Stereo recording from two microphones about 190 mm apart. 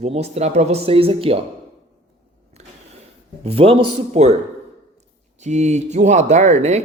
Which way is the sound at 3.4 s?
30° right (ahead or behind).